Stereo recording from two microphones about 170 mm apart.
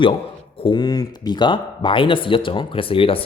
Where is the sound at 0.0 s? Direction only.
30° left (ahead or behind).